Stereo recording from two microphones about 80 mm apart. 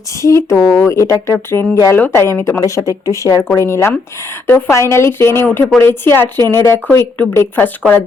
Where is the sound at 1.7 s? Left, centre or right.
Left.